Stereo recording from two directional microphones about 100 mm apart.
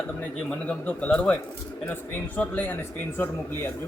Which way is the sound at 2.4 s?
15° left (ahead or behind).